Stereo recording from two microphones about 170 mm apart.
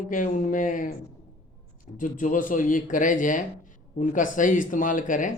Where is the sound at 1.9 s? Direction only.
50° left (ahead or behind).